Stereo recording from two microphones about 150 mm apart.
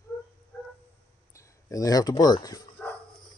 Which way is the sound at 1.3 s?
20° left (ahead or behind).